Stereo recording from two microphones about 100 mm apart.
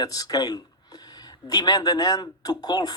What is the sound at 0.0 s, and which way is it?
Speech, 40° left (ahead or behind).